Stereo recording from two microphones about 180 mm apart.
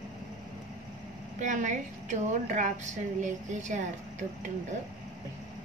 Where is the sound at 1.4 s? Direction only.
45° right (ahead or behind).